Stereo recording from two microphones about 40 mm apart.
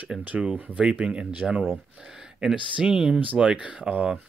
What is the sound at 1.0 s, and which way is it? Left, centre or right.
Speech, right.